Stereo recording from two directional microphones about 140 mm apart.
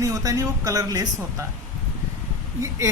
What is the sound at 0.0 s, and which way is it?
A woman's voice, 25° right (ahead or behind).